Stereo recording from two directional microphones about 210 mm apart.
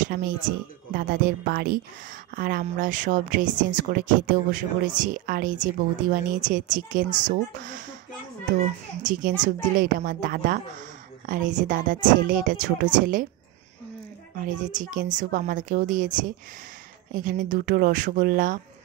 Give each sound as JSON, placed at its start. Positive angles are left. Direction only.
{"t": 0.0, "sound": "a woman's voice", "side_deg": -40}
{"t": 9.0, "sound": "a woman's voice", "side_deg": -40}
{"t": 14.4, "sound": "a woman's voice", "side_deg": -40}